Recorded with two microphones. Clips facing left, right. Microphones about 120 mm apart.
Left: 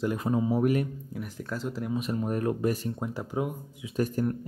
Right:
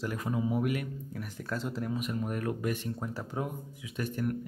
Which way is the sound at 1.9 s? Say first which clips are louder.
Left 7 dB; 25° left (ahead or behind).